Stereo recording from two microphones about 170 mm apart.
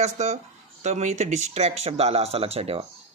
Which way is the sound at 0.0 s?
45° right (ahead or behind).